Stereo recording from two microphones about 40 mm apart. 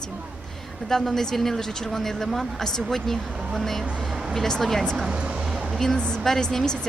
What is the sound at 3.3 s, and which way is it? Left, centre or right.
Speech, right.